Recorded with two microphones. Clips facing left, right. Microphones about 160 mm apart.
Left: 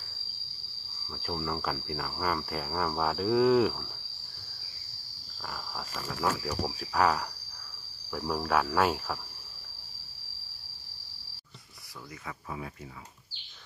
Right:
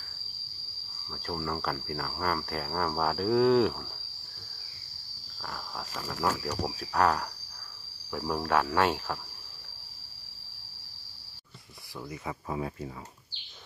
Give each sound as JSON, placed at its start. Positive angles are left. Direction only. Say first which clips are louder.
{"t": 1.1, "sound": "cricket", "louder": "even", "side_deg": 5}
{"t": 5.4, "sound": "cricket", "louder": "even", "side_deg": 0}
{"t": 12.3, "sound": "speech", "louder": "right 5 dB", "side_deg": -35}